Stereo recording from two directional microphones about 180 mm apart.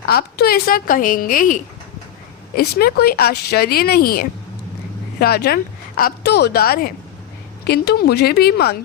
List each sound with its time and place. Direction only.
0.1 s a woman's voice: 60° left (ahead or behind)
2.6 s speech: 60° left (ahead or behind)